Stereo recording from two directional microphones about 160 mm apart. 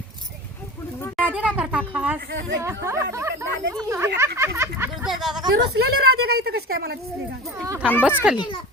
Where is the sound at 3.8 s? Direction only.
15° right (ahead or behind).